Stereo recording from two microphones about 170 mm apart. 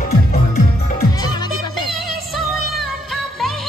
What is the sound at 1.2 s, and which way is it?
Music, 25° left (ahead or behind).